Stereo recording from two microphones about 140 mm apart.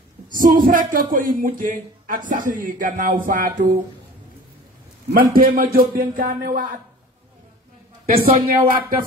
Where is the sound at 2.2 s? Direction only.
70° right (ahead or behind).